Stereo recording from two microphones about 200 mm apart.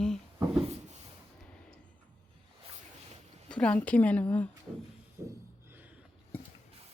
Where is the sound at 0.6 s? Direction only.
30° right (ahead or behind).